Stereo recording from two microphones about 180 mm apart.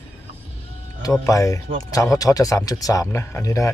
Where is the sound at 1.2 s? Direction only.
20° left (ahead or behind).